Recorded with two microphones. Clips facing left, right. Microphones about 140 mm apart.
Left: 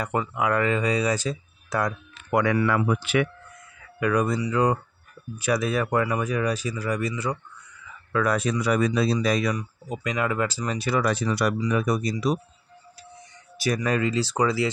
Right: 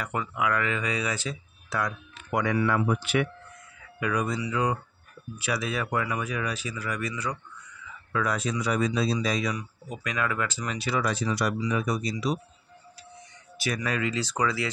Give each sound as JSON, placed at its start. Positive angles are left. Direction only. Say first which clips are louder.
{"t": 0.0, "sound": "speech", "louder": "left 3 dB", "side_deg": 30}
{"t": 2.3, "sound": "speech", "louder": "left 3 dB", "side_deg": 70}
{"t": 4.0, "sound": "speech", "louder": "left 5 dB", "side_deg": 50}
{"t": 8.1, "sound": "speech", "louder": "left 4 dB", "side_deg": 55}
{"t": 9.8, "sound": "speech", "louder": "left 4 dB", "side_deg": 25}
{"t": 13.6, "sound": "speech", "louder": "left 5 dB", "side_deg": 40}